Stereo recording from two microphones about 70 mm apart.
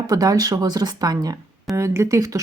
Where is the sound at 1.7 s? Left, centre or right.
Right.